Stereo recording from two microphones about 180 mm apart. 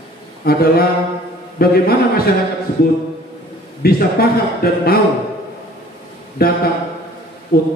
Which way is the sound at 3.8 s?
55° left (ahead or behind).